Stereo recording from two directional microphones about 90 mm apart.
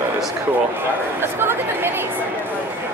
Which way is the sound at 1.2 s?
25° right (ahead or behind).